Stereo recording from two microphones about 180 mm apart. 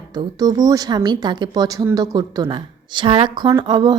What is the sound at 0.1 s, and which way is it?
Speech, 20° right (ahead or behind).